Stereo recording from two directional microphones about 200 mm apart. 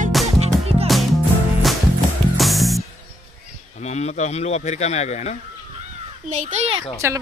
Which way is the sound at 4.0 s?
35° left (ahead or behind).